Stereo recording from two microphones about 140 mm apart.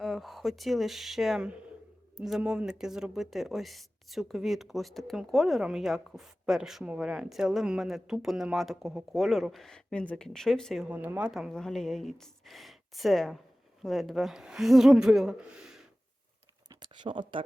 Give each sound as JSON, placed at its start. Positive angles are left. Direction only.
{"t": 0.0, "sound": "speech", "side_deg": 0}
{"t": 10.8, "sound": "speech", "side_deg": -10}
{"t": 16.6, "sound": "a sound", "side_deg": -35}